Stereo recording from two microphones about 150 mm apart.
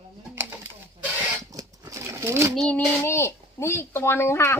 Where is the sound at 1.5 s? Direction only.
20° right (ahead or behind).